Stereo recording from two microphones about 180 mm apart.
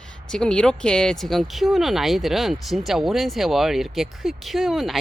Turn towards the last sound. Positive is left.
turn(degrees=0)  # may be behind; listen again after turning